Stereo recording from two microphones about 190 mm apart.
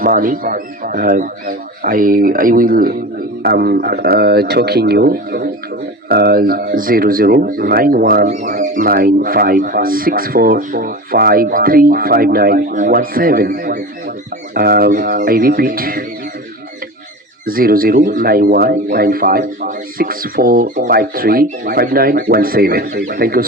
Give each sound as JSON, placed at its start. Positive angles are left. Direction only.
{"t": 0.0, "sound": "speech", "side_deg": -45}
{"t": 17.4, "sound": "speech", "side_deg": -50}